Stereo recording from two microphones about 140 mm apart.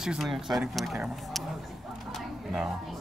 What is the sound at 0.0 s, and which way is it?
Speech, 5° right (ahead or behind).